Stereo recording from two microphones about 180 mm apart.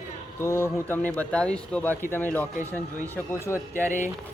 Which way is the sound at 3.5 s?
15° left (ahead or behind).